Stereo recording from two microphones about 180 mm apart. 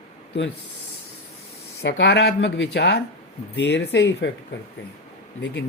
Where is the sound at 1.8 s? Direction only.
75° left (ahead or behind).